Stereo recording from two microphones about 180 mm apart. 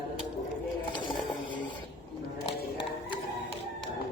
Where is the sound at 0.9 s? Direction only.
25° left (ahead or behind).